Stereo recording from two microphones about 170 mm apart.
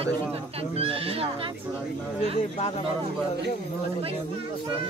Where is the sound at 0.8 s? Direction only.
35° right (ahead or behind).